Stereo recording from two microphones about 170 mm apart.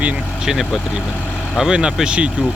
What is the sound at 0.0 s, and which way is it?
Speech, 5° right (ahead or behind).